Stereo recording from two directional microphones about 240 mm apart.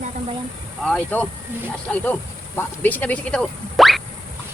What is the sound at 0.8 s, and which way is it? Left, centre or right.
Speech, centre.